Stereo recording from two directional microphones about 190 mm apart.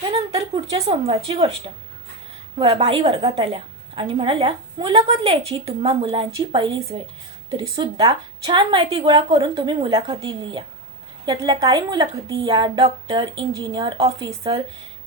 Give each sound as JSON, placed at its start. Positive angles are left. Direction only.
{"t": 0.1, "sound": "a woman's voice", "side_deg": -20}